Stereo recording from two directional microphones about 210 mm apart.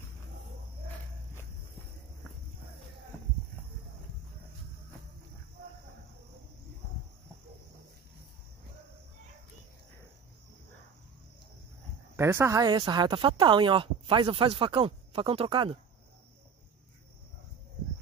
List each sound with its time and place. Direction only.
12.2 s speech: 10° right (ahead or behind)